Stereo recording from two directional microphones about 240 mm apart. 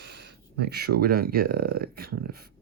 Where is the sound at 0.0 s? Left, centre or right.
Right.